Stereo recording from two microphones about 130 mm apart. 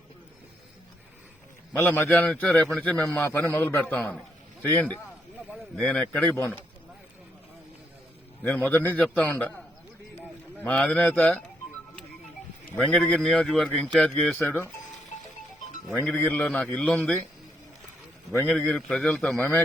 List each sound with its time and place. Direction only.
1.8 s a man's voice: 15° left (ahead or behind)
8.4 s a man's voice: 10° left (ahead or behind)
10.6 s a man's voice: 10° left (ahead or behind)
12.7 s speech: 5° left (ahead or behind)
16.0 s a man's voice: 15° left (ahead or behind)
18.3 s a man's voice: 10° left (ahead or behind)